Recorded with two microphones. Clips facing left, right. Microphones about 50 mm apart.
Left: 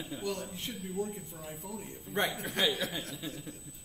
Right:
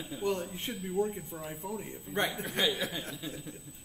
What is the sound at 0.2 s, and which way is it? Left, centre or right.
A man's voice, right.